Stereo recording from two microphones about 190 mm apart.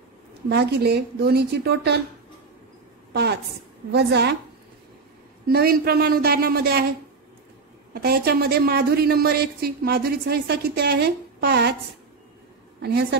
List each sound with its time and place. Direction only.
0.5 s a woman's voice: 60° right (ahead or behind)
3.1 s a sound: 60° right (ahead or behind)
3.9 s a woman's voice: 60° right (ahead or behind)
5.5 s speech: 55° right (ahead or behind)
7.9 s a woman's voice: 55° right (ahead or behind)
12.8 s a woman's voice: 60° right (ahead or behind)